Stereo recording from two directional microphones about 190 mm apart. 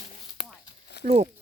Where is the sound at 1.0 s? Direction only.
60° left (ahead or behind).